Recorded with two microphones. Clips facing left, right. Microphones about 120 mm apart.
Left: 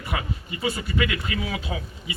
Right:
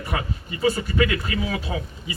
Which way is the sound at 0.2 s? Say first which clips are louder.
Right 4 dB; 35° right (ahead or behind).